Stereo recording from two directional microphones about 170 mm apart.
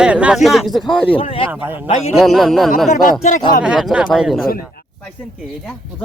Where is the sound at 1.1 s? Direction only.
35° left (ahead or behind).